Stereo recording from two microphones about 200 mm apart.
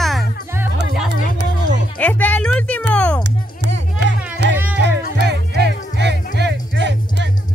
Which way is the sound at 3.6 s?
60° right (ahead or behind).